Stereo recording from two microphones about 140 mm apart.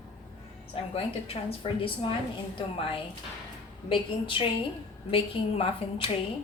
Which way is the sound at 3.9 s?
40° left (ahead or behind).